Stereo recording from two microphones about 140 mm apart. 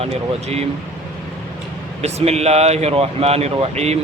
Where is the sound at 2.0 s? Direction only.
50° right (ahead or behind).